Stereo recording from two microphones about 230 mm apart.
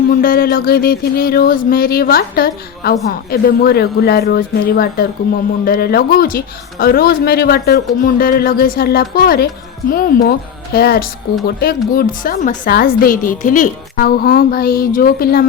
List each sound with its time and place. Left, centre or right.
0.1 s a woman's voice: left